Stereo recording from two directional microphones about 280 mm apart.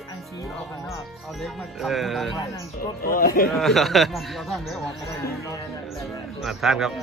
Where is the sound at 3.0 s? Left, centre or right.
Left.